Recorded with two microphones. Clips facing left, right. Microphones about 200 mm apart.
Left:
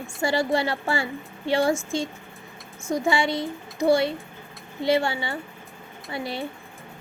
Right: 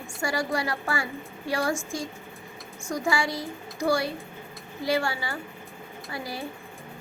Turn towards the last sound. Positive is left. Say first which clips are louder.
# left 4 dB
turn(degrees=25)  # may be behind; listen again after turning